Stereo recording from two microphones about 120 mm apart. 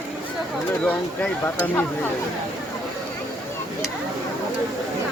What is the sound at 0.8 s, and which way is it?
Speech, 10° left (ahead or behind).